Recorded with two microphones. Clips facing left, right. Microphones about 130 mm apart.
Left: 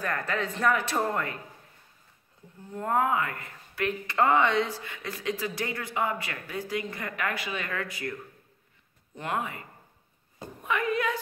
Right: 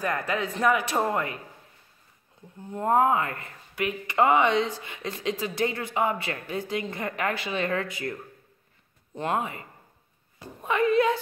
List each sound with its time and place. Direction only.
0.0 s speech: 10° right (ahead or behind)
2.7 s speech: 20° right (ahead or behind)
3.7 s speech: 15° right (ahead or behind)
9.1 s speech: 25° right (ahead or behind)
10.6 s a woman's voice: 30° right (ahead or behind)